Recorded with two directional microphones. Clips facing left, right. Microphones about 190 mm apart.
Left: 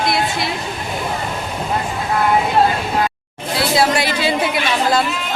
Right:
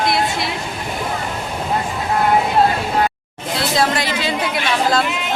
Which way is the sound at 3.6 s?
10° left (ahead or behind).